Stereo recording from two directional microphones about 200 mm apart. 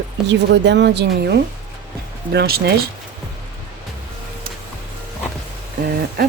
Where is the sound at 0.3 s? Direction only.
60° right (ahead or behind).